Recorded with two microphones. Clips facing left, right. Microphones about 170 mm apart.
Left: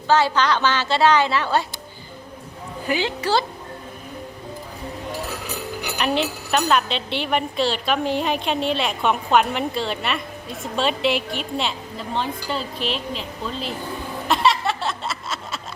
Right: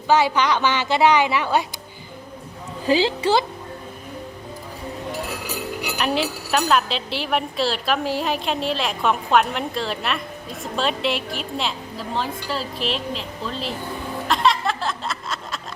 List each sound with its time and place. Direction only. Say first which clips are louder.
0.1 s a woman's voice: even; 15° right (ahead or behind)
2.8 s a woman's voice: right 5 dB; 30° right (ahead or behind)
5.8 s a woman's voice: left 1 dB; 5° right (ahead or behind)
14.3 s a sound: left 1 dB; centre (ahead or behind)